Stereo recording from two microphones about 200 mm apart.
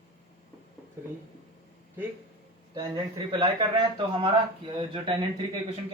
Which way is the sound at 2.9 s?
25° right (ahead or behind).